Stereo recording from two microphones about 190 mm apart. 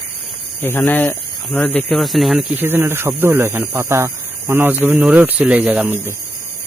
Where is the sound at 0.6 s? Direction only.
10° left (ahead or behind); by 6.2 s 5° right (ahead or behind).